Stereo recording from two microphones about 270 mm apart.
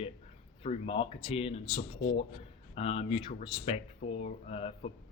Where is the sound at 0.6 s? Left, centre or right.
Left.